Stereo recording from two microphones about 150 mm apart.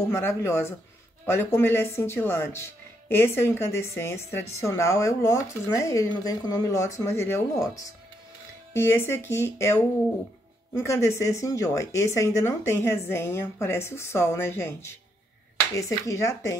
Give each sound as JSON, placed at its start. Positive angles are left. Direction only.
{"t": 0.1, "sound": "speech", "side_deg": 15}
{"t": 16.1, "sound": "speech", "side_deg": 20}